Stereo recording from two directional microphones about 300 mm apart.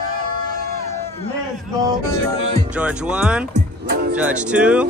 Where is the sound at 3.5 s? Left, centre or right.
Right.